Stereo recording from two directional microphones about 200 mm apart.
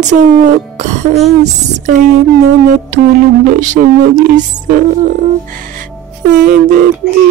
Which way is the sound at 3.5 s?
40° right (ahead or behind).